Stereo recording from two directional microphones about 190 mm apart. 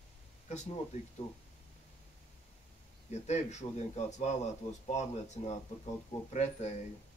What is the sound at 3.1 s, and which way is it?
A man's voice, 35° left (ahead or behind).